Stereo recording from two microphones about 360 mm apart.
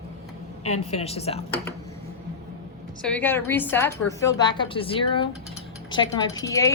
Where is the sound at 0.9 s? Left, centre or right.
Centre.